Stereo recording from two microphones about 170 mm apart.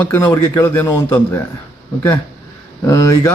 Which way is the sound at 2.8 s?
20° left (ahead or behind).